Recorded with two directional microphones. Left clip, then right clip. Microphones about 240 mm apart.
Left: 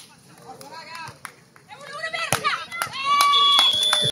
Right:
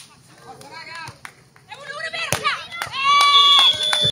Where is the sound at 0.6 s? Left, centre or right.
Left.